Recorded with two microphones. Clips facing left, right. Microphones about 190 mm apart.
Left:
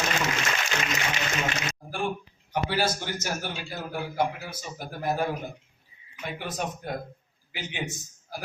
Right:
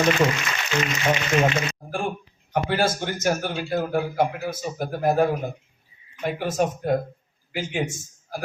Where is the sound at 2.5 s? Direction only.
50° right (ahead or behind).